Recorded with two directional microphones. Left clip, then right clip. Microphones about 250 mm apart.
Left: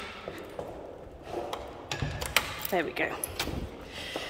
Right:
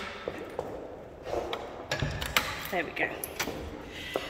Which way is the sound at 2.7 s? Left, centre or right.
Centre.